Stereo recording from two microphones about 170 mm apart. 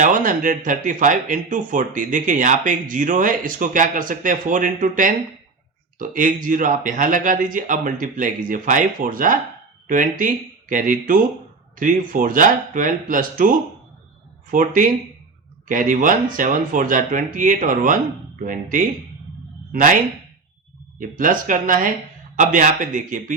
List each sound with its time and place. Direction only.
0.0 s speech: 50° right (ahead or behind)
14.5 s speech: 50° right (ahead or behind)
21.0 s speech: 50° right (ahead or behind)